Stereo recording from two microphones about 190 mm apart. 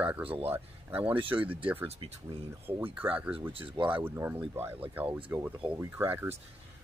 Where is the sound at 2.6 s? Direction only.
10° right (ahead or behind).